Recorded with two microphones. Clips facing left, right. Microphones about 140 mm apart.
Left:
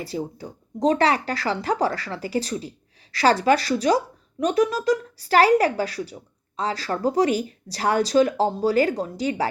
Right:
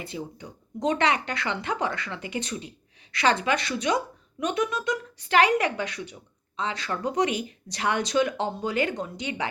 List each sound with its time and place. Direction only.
0.0 s speech: 35° left (ahead or behind)